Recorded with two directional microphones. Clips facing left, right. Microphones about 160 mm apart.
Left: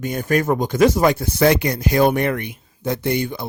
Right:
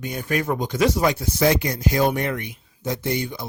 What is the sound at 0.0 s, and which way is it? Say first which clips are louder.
Speech: left 5 dB; 45° left (ahead or behind).